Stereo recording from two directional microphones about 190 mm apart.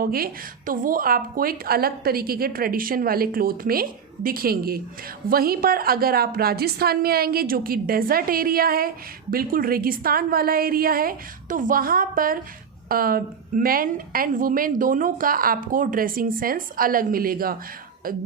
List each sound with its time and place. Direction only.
0.0 s a woman's voice: 50° right (ahead or behind)